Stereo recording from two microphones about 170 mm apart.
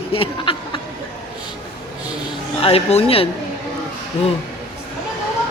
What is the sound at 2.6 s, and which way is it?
Speech, 35° left (ahead or behind).